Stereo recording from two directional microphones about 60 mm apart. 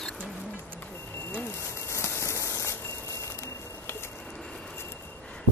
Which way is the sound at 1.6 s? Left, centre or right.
Left.